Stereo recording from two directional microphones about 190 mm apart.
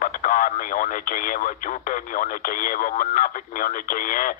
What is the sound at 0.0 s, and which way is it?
Speech, 45° left (ahead or behind).